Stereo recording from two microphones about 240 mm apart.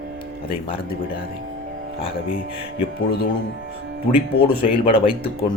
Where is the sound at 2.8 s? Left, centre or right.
Left.